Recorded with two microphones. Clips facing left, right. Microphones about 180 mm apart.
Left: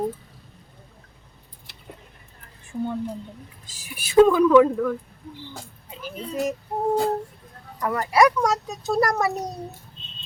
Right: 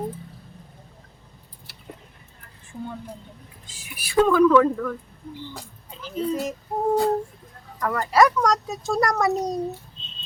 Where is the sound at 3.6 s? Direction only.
40° left (ahead or behind).